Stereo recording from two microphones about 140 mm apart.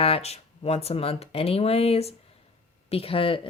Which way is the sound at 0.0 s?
45° left (ahead or behind).